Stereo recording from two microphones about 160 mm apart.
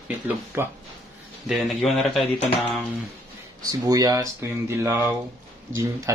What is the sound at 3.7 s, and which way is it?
Speech, 25° right (ahead or behind).